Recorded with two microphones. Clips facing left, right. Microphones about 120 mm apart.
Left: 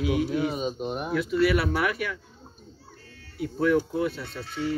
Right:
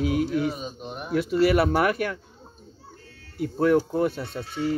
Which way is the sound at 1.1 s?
40° right (ahead or behind).